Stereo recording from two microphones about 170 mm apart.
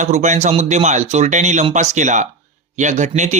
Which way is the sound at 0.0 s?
45° right (ahead or behind).